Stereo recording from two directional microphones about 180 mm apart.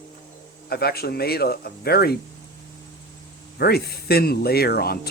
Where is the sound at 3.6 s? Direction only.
60° left (ahead or behind).